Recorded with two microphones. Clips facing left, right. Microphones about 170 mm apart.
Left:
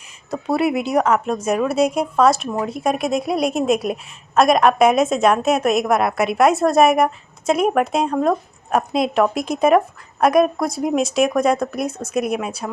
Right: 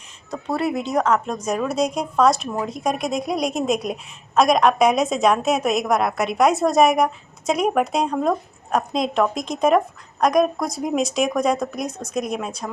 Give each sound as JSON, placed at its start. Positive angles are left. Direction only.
{"t": 0.3, "sound": "a woman's voice", "side_deg": 10}